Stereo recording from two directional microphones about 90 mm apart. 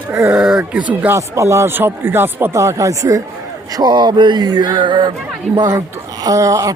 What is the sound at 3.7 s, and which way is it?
Speech, 55° right (ahead or behind).